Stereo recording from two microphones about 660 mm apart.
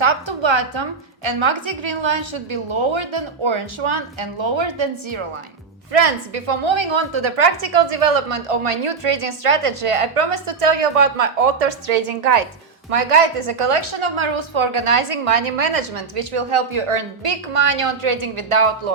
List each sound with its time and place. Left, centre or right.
0.0 s a woman's voice: right
5.9 s a woman's voice: right
12.9 s a woman's voice: right